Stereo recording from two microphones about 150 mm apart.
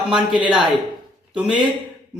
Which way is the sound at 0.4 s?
5° right (ahead or behind).